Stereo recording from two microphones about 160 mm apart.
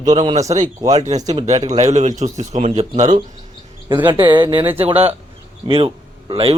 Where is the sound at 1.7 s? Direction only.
45° right (ahead or behind).